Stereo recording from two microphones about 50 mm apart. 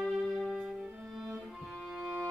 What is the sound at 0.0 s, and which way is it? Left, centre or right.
Music, centre.